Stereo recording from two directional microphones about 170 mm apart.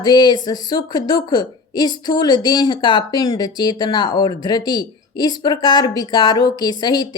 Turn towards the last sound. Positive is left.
turn(degrees=25)  # may be behind; listen again after turning